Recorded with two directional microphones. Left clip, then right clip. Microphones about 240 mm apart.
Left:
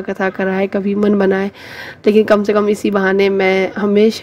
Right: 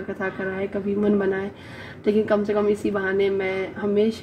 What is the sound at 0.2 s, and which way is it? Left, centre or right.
A woman's voice, left.